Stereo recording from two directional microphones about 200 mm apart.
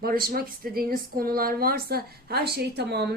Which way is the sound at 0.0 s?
50° right (ahead or behind).